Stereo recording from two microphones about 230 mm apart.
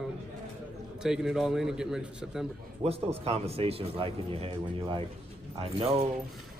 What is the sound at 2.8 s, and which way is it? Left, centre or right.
Speech, right.